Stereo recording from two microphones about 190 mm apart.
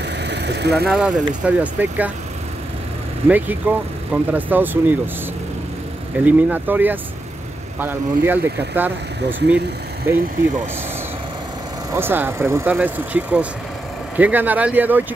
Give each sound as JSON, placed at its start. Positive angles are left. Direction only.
{"t": 0.0, "sound": "vehicle", "side_deg": -65}
{"t": 0.8, "sound": "speech", "side_deg": -5}
{"t": 3.3, "sound": "speech", "side_deg": -10}
{"t": 6.2, "sound": "speech", "side_deg": -10}
{"t": 10.1, "sound": "speech", "side_deg": -10}
{"t": 11.9, "sound": "speech", "side_deg": -10}